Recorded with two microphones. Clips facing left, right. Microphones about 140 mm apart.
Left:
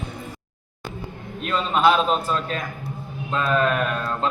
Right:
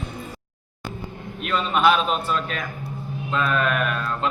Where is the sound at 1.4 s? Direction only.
30° left (ahead or behind).